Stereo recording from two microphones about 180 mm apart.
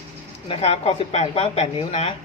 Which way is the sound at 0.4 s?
35° left (ahead or behind).